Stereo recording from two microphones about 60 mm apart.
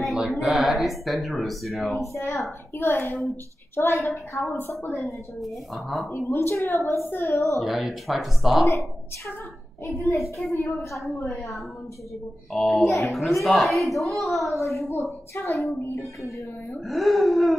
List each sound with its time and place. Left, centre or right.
0.3 s speech: centre
2.1 s a woman's voice: left
2.7 s a child's voice: left
4.1 s a woman's voice: left
4.9 s speech: centre
6.1 s a woman's voice: left
7.3 s a woman's voice: left
7.6 s speech: centre
10.5 s a woman's voice: left
11.2 s speech: centre
14.6 s a woman's voice: left
16.0 s speech: centre